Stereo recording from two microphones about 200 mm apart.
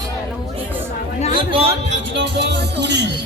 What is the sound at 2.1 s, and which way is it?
Speech, 60° right (ahead or behind).